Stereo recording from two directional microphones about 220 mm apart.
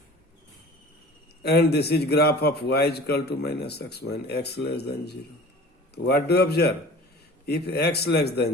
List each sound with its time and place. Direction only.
1.4 s a man's voice: 50° left (ahead or behind)